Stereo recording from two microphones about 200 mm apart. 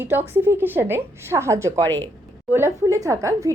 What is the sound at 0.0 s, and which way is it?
A woman's voice, 10° right (ahead or behind).